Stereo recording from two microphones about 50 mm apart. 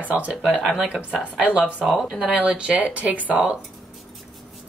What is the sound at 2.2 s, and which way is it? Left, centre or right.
Speech, right.